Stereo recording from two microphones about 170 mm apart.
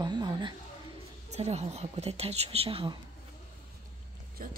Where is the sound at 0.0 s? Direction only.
25° right (ahead or behind).